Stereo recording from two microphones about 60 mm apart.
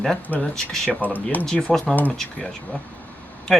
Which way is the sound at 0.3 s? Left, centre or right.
Left.